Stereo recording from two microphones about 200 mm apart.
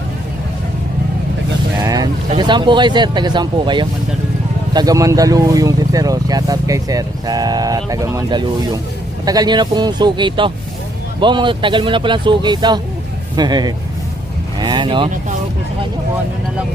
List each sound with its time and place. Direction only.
1.8 s speech: 20° right (ahead or behind)